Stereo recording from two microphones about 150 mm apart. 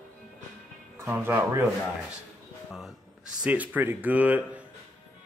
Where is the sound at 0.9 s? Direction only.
15° right (ahead or behind).